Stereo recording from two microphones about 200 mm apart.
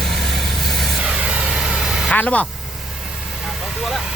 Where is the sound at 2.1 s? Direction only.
5° left (ahead or behind).